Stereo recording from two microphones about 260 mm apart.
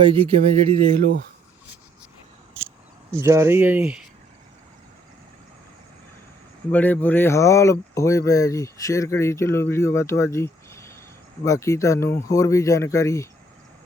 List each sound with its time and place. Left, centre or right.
0.0 s speech: right
3.1 s speech: centre
6.7 s speech: centre